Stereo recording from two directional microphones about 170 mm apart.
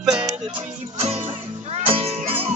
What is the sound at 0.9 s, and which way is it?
Music, 35° right (ahead or behind).